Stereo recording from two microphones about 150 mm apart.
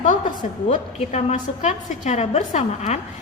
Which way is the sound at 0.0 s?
60° left (ahead or behind).